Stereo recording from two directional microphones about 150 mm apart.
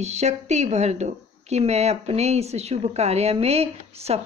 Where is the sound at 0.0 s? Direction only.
50° right (ahead or behind).